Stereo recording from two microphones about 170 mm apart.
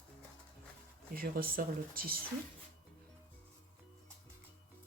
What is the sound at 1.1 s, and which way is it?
Speech, 60° right (ahead or behind).